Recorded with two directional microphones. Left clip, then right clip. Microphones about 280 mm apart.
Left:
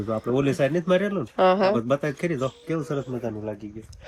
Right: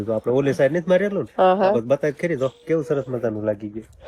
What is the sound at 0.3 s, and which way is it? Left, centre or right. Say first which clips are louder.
Speech: right 3 dB; centre.